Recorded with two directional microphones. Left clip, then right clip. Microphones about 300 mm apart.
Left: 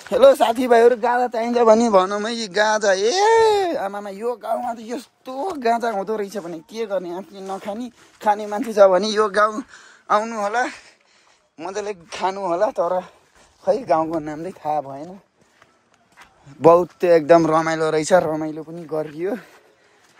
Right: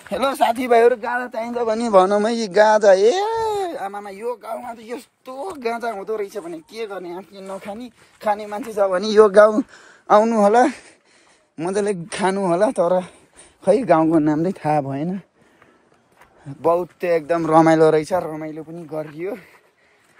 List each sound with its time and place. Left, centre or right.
0.0 s speech: centre
1.5 s a man's voice: left
2.0 s speech: centre
3.3 s speech: left; by 8.5 s centre
8.5 s speech: left
8.9 s speech: centre
9.2 s a man's voice: centre; by 12.6 s right
12.6 s speech: right
13.6 s a sound: right
14.6 s speech: right
16.7 s speech: centre
17.5 s speech: centre
18.0 s speech: left
18.3 s speech: centre